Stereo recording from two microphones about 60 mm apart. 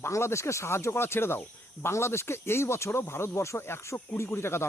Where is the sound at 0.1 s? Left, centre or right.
Left.